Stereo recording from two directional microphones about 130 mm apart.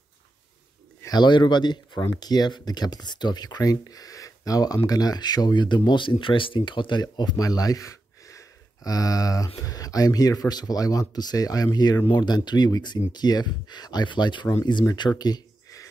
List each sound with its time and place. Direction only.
1.0 s speech: 35° left (ahead or behind)